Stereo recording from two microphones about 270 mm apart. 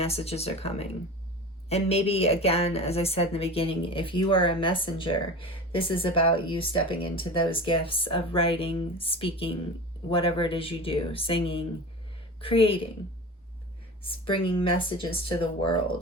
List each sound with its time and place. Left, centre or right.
0.0 s speech: left
14.1 s speech: centre